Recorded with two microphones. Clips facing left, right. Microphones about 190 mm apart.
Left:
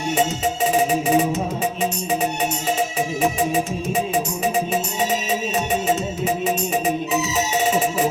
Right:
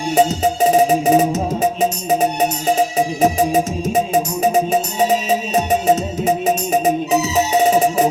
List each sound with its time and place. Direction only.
0.2 s music: 40° right (ahead or behind)